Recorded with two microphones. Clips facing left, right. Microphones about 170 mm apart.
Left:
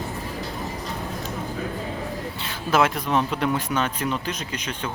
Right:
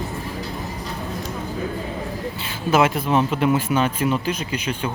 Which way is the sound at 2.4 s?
5° right (ahead or behind).